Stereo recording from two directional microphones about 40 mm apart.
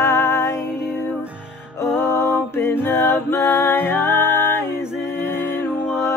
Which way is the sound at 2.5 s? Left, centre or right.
Left.